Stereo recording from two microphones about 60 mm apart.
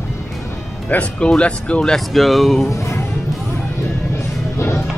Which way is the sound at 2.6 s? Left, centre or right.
Left.